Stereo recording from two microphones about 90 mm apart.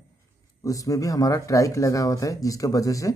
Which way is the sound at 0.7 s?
40° left (ahead or behind).